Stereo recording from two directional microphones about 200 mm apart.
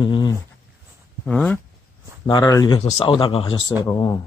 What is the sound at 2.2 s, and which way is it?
Speech, 20° left (ahead or behind).